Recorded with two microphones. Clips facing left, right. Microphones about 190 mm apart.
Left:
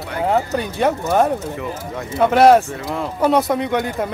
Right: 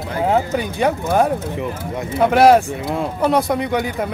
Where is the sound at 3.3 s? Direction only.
5° right (ahead or behind).